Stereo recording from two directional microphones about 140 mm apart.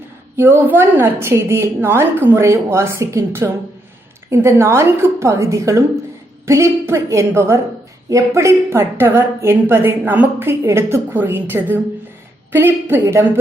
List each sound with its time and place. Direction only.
0.3 s a woman's voice: 15° right (ahead or behind)